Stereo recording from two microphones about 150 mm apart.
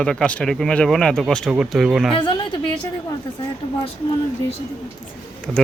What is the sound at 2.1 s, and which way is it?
Speech, 30° left (ahead or behind).